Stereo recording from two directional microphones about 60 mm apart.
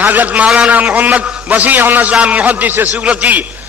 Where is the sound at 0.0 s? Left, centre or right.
Right.